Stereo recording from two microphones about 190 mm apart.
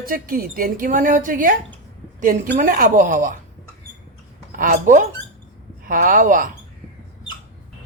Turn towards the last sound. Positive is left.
turn(degrees=-45)  # may be behind; listen again after turning